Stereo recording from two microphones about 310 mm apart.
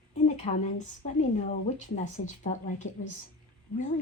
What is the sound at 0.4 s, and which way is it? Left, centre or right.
Speech, left.